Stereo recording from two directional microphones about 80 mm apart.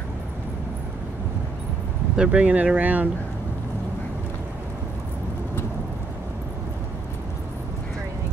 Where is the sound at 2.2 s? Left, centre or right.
Centre.